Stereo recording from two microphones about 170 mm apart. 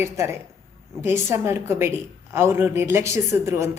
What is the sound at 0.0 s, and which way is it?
A woman's voice, 15° right (ahead or behind).